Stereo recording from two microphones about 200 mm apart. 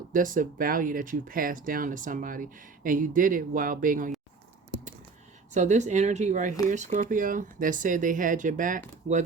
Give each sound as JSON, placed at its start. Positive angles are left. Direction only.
{"t": 0.1, "sound": "speech", "side_deg": -45}
{"t": 5.5, "sound": "speech", "side_deg": -35}